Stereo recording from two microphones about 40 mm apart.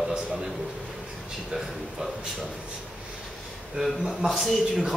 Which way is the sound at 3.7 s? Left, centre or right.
Centre.